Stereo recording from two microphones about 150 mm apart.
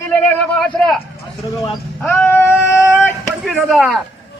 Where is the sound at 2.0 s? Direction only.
15° left (ahead or behind).